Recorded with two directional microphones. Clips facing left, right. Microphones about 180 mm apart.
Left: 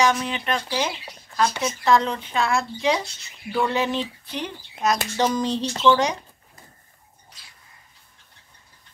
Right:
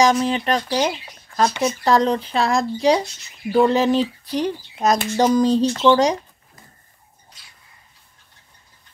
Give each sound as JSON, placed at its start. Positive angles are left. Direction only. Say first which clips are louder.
{"t": 0.0, "sound": "speech", "louder": "right 5 dB", "side_deg": -35}